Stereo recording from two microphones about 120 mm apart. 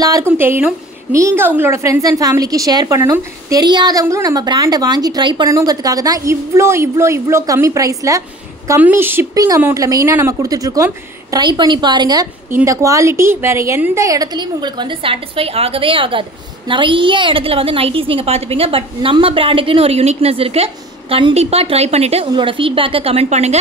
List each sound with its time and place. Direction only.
0.0 s speech: 30° right (ahead or behind)
0.4 s a woman's voice: 20° right (ahead or behind)
9.3 s a woman's voice: 30° right (ahead or behind)
14.0 s a woman's voice: 30° right (ahead or behind); by 22.3 s 60° right (ahead or behind)
22.3 s a woman's voice: 45° right (ahead or behind); by 23.6 s 65° right (ahead or behind)